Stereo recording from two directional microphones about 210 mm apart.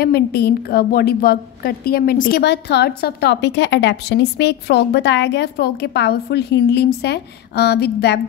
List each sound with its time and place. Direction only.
0.0 s a woman's voice: 50° left (ahead or behind)